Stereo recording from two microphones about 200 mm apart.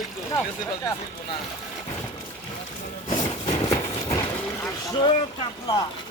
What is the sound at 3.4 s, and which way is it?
Clip-clop, 15° left (ahead or behind).